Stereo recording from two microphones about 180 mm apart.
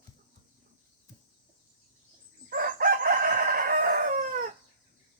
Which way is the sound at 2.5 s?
50° right (ahead or behind).